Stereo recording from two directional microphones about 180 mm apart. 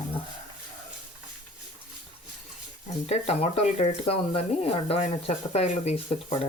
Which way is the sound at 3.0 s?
35° left (ahead or behind).